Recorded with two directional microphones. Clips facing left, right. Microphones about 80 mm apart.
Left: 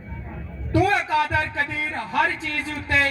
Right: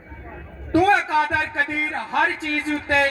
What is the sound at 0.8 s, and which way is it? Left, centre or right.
A man's voice, right.